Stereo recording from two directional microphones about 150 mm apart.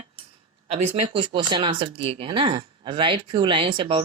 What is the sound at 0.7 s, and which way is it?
Speech, 35° right (ahead or behind).